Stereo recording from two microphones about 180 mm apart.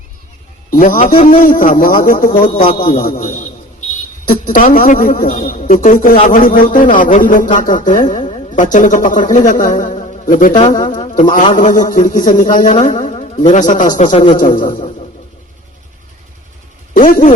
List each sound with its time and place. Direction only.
0.7 s a man's voice: 50° left (ahead or behind)
16.9 s speech: 50° left (ahead or behind)